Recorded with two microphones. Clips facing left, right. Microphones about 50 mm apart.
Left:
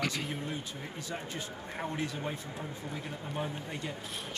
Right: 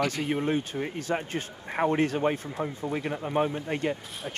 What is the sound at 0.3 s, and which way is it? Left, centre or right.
Speech, right.